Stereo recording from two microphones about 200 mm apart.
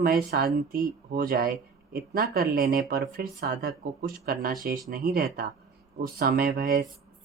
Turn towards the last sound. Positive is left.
turn(degrees=-50)  # may be behind; listen again after turning